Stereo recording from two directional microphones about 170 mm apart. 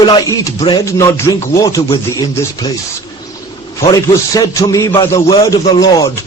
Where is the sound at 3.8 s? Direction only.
20° left (ahead or behind).